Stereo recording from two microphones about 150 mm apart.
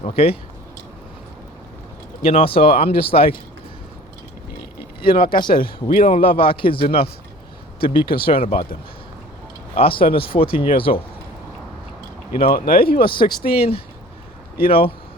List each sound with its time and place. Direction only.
0.0 s speech: 40° left (ahead or behind)
2.2 s speech: 40° left (ahead or behind)
5.0 s speech: 80° left
6.1 s speech: 40° left (ahead or behind)
8.0 s speech: 90° left
8.3 s speech: 40° left (ahead or behind)
9.7 s speech: 35° left (ahead or behind)
12.5 s speech: 75° left (ahead or behind)
13.1 s speech: 35° left (ahead or behind)